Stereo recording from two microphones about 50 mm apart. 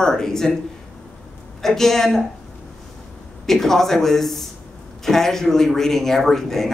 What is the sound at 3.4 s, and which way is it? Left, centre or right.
Speech, centre.